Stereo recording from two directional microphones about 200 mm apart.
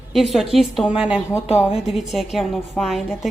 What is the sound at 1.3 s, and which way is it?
Speech, 30° left (ahead or behind).